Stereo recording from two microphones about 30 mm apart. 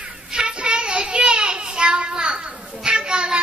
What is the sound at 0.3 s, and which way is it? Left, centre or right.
Child singing, right.